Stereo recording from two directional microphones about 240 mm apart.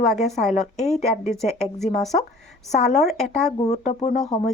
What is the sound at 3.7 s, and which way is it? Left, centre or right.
Speech, left.